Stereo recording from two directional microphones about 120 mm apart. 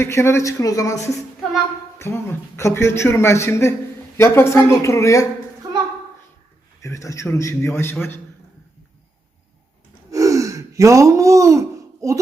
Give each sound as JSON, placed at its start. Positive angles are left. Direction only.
{"t": 0.0, "sound": "a man's voice", "side_deg": 20}
{"t": 6.8, "sound": "a man's voice", "side_deg": 25}
{"t": 10.1, "sound": "gasp", "side_deg": -25}